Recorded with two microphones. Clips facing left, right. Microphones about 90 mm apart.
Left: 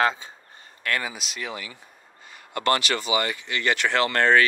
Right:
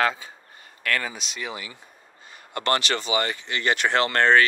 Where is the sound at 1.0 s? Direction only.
5° left (ahead or behind).